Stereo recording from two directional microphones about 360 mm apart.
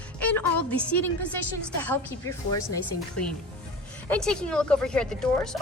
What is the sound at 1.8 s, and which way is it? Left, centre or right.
A woman's voice, centre.